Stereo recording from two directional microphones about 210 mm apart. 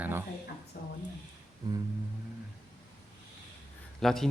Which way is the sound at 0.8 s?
45° left (ahead or behind).